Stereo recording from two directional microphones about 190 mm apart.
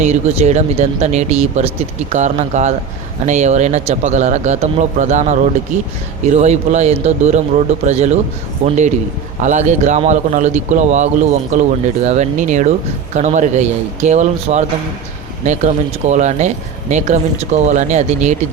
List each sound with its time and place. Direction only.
0.0 s speech: 35° right (ahead or behind)